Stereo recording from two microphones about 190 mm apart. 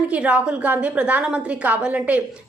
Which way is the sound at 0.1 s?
5° right (ahead or behind).